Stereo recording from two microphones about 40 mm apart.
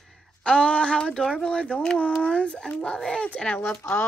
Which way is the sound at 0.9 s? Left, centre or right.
Centre.